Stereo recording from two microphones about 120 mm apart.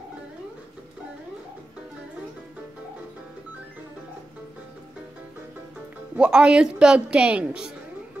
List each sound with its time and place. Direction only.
6.1 s a woman's voice: 10° right (ahead or behind)